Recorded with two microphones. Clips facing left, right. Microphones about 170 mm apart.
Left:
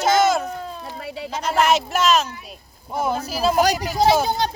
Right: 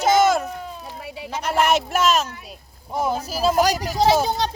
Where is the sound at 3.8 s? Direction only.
35° right (ahead or behind).